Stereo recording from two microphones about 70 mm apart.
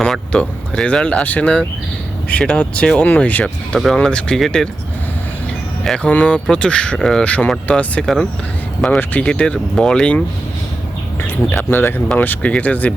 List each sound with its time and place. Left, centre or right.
0.0 s speech: centre
3.8 s speech: centre
5.8 s speech: centre
6.1 s speech: centre
8.0 s speech: centre
8.9 s speech: left
11.7 s speech: left